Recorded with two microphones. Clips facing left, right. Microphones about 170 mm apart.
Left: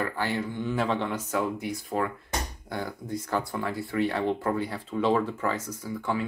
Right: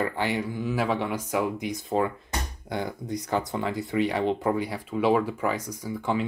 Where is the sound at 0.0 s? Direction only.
20° right (ahead or behind).